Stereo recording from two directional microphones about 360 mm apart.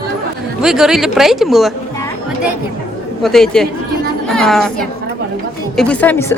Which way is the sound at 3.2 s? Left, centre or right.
Centre.